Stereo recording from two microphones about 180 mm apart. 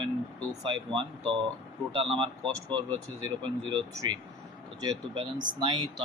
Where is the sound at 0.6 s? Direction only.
30° right (ahead or behind).